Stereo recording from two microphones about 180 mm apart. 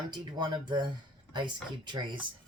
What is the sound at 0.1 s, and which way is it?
Speech, 25° right (ahead or behind).